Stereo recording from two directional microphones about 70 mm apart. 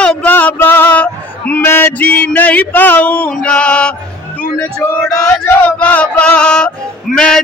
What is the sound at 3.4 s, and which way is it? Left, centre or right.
Male singing, centre.